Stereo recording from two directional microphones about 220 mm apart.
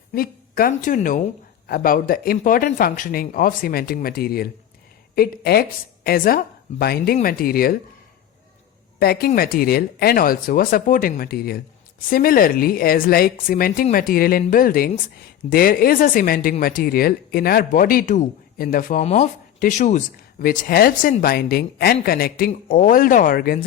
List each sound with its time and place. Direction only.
0.1 s a woman's voice: 40° left (ahead or behind)
9.0 s speech: 45° left (ahead or behind)